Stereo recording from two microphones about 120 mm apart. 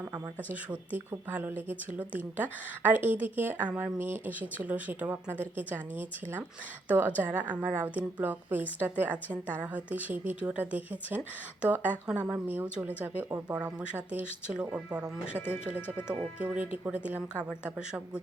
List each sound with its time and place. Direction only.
0.5 s speech: 10° right (ahead or behind)
15.4 s speech: 20° left (ahead or behind)
15.6 s speech: 15° right (ahead or behind)